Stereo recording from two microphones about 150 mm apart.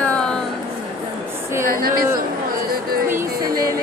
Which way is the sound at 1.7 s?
85° right.